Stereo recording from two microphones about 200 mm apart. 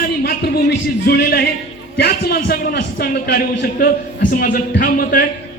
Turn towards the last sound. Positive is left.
turn(degrees=45)  # may be behind; listen again after turning